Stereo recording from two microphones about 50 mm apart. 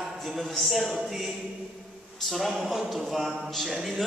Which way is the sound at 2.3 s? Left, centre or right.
Centre.